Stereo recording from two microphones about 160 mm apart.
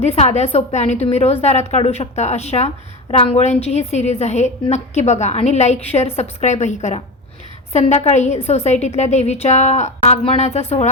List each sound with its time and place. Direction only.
0.0 s a woman's voice: 40° left (ahead or behind)